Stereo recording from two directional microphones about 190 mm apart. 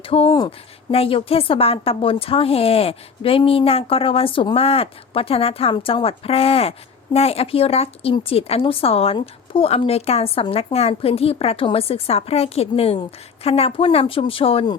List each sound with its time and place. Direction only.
0.0 s a woman's voice: 30° left (ahead or behind)